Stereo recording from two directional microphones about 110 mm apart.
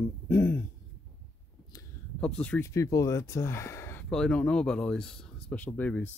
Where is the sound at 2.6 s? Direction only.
25° left (ahead or behind).